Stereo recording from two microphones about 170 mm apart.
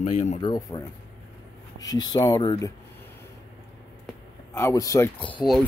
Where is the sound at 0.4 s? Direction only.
25° left (ahead or behind).